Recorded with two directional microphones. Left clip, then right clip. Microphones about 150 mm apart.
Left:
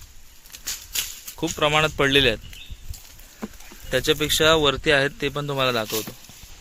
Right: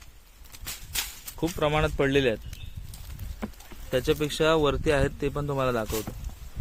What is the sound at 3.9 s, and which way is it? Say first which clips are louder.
Speech: left 5 dB; centre (ahead or behind).